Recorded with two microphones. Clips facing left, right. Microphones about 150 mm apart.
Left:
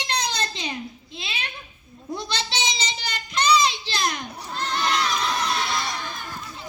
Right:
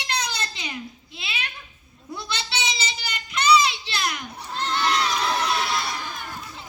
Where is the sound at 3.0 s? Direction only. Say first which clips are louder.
Left 1 dB; 35° left (ahead or behind).